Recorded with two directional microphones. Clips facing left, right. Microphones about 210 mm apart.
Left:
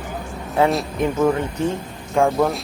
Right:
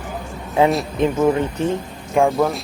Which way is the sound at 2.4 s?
Centre (ahead or behind).